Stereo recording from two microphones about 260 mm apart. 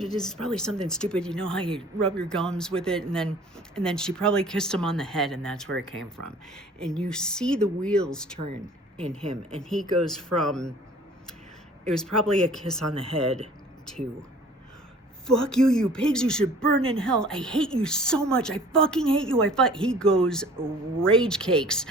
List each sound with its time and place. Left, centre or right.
0.0 s speech: centre
9.6 s speech: centre
11.9 s speech: centre
15.3 s speech: centre